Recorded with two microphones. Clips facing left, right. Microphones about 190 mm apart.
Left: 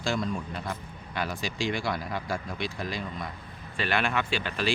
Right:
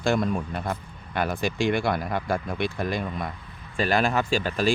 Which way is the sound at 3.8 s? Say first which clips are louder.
Right 5 dB; 40° right (ahead or behind).